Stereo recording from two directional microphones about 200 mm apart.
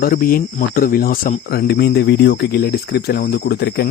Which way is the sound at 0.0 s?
45° left (ahead or behind).